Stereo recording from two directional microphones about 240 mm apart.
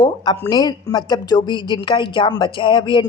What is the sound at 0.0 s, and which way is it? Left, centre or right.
Speech, centre.